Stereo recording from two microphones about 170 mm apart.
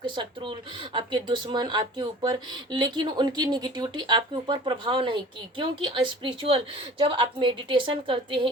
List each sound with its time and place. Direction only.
0.2 s speech: 30° right (ahead or behind)